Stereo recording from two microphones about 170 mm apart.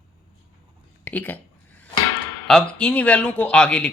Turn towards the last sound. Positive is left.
turn(degrees=5)  # may be behind; listen again after turning